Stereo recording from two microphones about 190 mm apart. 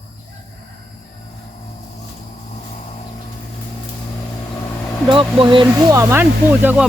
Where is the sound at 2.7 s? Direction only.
35° left (ahead or behind).